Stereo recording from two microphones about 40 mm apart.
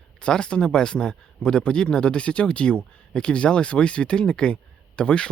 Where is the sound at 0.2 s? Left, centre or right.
Left.